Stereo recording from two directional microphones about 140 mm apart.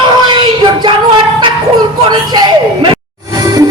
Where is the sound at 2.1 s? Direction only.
35° right (ahead or behind).